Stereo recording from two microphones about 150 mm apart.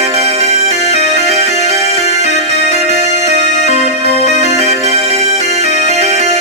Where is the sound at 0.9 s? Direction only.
45° left (ahead or behind).